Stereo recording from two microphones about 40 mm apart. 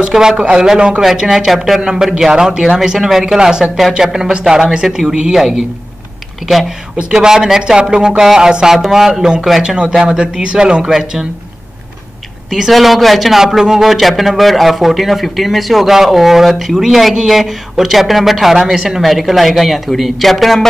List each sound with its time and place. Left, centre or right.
0.0 s speech: centre
6.4 s speech: centre
7.1 s speech: centre
8.7 s speech: centre
9.2 s speech: centre
10.9 s speech: centre
12.5 s speech: centre